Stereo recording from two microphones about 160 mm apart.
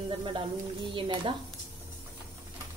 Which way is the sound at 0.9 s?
30° right (ahead or behind).